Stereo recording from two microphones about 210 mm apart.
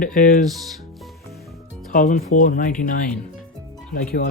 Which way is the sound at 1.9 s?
40° left (ahead or behind).